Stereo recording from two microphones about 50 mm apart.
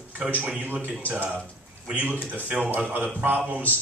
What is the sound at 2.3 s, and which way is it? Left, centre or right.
Speech, right.